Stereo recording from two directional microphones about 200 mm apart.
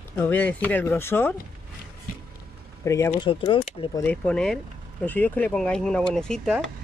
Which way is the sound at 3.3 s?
25° left (ahead or behind).